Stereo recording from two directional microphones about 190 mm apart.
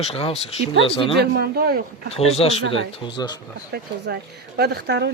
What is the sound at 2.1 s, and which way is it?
Speech, 30° left (ahead or behind).